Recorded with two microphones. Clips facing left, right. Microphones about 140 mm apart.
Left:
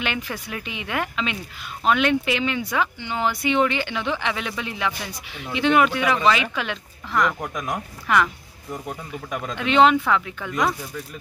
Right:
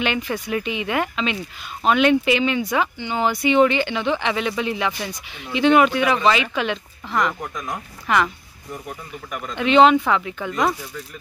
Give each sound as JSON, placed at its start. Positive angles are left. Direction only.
{"t": 0.0, "sound": "speech", "side_deg": 0}
{"t": 7.1, "sound": "speech", "side_deg": -30}
{"t": 7.4, "sound": "speech", "side_deg": 15}
{"t": 8.1, "sound": "speech", "side_deg": 0}
{"t": 9.6, "sound": "speech", "side_deg": 0}